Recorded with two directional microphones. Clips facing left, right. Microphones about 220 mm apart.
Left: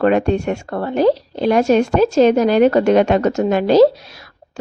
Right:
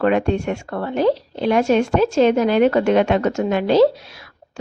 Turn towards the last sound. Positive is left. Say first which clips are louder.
# left 1 dB
turn(degrees=40)  # may be behind; listen again after turning